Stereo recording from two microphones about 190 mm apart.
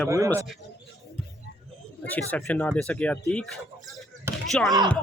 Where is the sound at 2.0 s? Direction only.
10° left (ahead or behind).